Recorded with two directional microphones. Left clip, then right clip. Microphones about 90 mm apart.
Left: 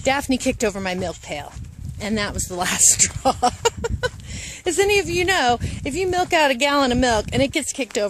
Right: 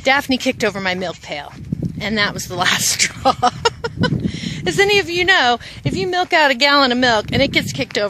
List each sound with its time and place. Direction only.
0.2 s speech: 20° left (ahead or behind)
3.6 s a sound: 35° left (ahead or behind)
4.6 s speech: 20° left (ahead or behind)